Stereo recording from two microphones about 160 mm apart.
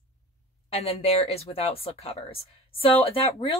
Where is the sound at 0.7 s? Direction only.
40° left (ahead or behind).